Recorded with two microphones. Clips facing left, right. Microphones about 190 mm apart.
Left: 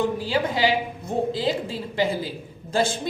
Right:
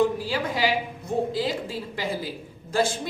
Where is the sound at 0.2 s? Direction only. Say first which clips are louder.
Left 3 dB; 25° left (ahead or behind).